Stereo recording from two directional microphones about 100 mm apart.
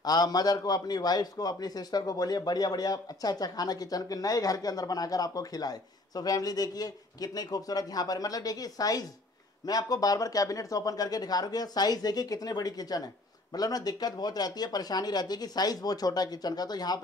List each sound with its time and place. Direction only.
0.0 s a man's voice: 40° left (ahead or behind)